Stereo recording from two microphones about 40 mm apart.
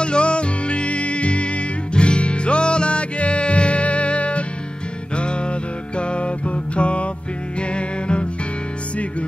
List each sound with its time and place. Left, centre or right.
0.0 s music: left